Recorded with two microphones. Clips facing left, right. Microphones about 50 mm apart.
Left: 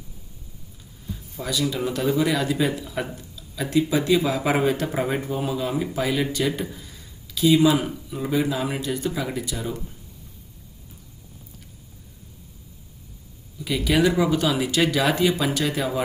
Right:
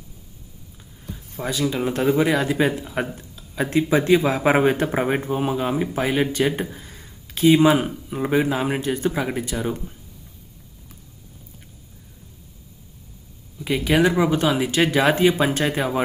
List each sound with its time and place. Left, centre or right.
1.4 s speech: right
13.6 s speech: right